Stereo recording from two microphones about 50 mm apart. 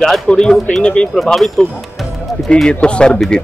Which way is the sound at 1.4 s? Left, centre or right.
Centre.